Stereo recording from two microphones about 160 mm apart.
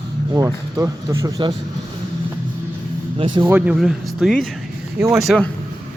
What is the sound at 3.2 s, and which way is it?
Speech, 30° right (ahead or behind).